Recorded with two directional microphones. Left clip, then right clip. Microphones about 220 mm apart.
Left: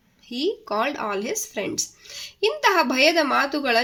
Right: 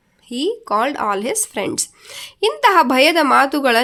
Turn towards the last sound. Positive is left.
turn(degrees=-40)  # may be behind; listen again after turning